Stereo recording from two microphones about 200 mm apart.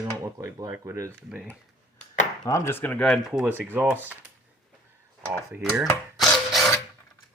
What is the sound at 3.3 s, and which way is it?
Speech, 10° right (ahead or behind).